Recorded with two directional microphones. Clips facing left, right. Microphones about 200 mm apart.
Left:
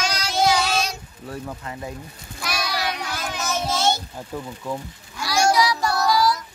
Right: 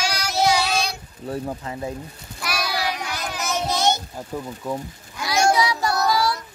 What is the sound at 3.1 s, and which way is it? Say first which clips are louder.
Child singing: even; 15° right (ahead or behind).